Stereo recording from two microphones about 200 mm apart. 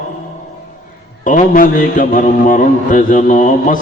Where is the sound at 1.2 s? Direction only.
40° left (ahead or behind).